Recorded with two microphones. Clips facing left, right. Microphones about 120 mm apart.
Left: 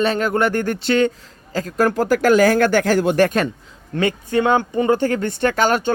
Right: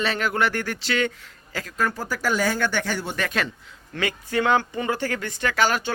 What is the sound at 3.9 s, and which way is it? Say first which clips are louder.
Speech: left 6 dB; 25° left (ahead or behind).